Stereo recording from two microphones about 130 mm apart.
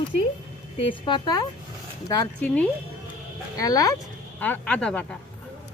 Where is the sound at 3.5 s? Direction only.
25° left (ahead or behind).